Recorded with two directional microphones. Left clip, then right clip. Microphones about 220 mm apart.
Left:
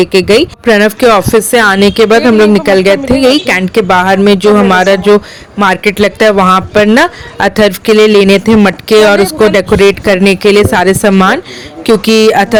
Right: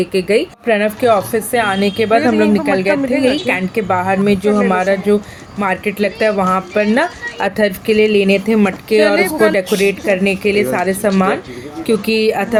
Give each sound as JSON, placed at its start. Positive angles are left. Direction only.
{"t": 0.0, "sound": "speech", "side_deg": 50}